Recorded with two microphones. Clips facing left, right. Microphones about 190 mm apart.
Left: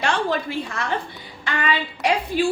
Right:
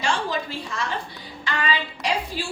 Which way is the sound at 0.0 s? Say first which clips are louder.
Left 3 dB; 60° left (ahead or behind).